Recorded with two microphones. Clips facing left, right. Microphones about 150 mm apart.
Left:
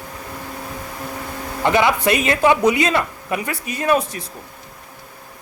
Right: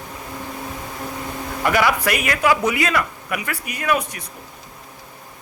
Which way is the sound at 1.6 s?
25° left (ahead or behind).